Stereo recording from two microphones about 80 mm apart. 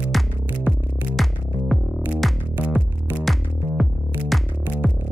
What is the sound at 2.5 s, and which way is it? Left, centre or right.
Music, right.